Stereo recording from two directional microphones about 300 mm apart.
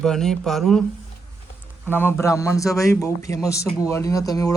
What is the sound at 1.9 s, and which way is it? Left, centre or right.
A man's voice, centre.